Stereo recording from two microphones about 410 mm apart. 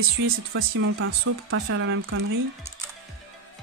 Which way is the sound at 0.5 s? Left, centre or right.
Right.